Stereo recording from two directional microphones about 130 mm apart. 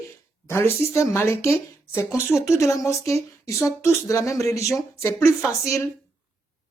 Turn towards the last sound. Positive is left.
turn(degrees=25)  # may be behind; listen again after turning